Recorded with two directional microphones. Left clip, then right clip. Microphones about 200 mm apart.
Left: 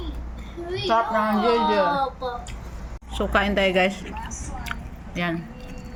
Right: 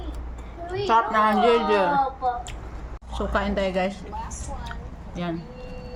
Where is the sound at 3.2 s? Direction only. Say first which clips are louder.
Left 4 dB; 5° left (ahead or behind).